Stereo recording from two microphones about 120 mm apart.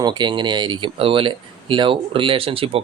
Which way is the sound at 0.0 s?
40° right (ahead or behind).